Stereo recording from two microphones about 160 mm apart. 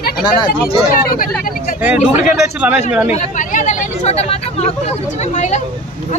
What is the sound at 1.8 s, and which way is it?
Speech, 10° right (ahead or behind).